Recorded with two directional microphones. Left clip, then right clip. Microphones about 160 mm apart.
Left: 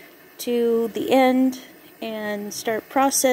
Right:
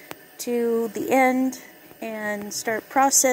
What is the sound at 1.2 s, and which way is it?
A woman's voice, 15° left (ahead or behind).